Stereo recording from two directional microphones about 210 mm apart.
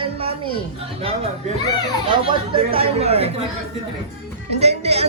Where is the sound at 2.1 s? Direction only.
25° right (ahead or behind).